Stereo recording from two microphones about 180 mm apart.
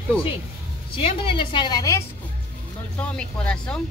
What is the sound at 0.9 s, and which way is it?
A woman's voice, 30° left (ahead or behind).